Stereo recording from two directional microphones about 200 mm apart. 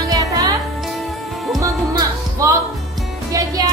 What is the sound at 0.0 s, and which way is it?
Music, 15° right (ahead or behind).